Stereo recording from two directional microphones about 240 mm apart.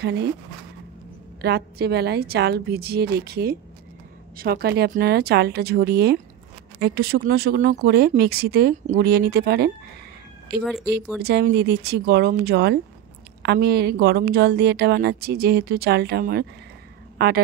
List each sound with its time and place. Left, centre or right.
0.0 s a woman's voice: right
1.4 s a woman's voice: right